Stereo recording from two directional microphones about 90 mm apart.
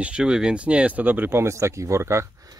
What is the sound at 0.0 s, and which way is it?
Speech, 10° right (ahead or behind).